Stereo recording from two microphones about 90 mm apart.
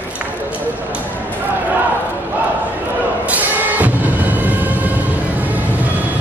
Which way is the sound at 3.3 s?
20° right (ahead or behind).